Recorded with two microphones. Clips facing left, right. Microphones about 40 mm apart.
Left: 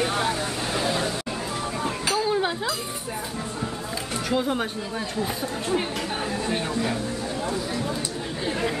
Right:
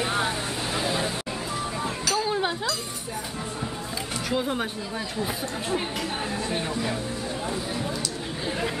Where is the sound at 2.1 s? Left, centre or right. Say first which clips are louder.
Left 2 dB; centre.